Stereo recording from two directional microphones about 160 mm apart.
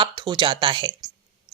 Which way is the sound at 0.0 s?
30° right (ahead or behind).